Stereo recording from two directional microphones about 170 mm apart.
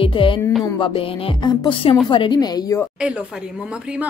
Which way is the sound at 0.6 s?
25° left (ahead or behind).